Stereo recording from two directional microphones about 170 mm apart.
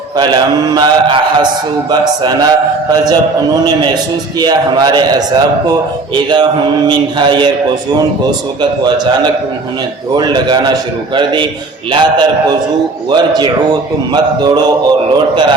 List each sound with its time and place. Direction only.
0.2 s a man's voice: 25° right (ahead or behind)
4.4 s a man's voice: 25° right (ahead or behind)
10.2 s a man's voice: 25° right (ahead or behind)